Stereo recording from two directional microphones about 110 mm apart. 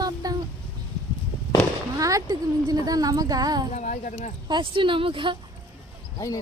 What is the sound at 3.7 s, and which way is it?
Speech, 90° left.